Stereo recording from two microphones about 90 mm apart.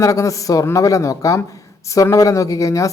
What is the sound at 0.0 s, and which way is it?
Speech, 35° left (ahead or behind).